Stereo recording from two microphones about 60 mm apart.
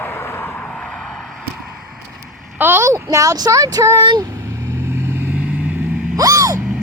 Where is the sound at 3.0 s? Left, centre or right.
Right.